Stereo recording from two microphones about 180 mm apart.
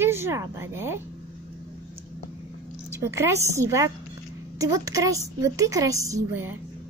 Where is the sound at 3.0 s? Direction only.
15° right (ahead or behind).